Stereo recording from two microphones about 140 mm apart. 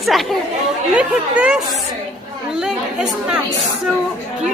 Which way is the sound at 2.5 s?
5° right (ahead or behind).